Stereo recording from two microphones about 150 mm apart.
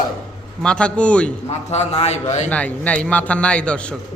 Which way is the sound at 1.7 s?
45° left (ahead or behind).